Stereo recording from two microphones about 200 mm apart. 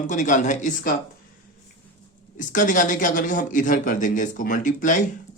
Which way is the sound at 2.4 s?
40° left (ahead or behind).